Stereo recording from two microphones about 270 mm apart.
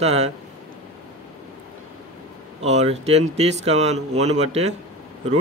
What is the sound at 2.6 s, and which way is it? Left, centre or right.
Speech, right.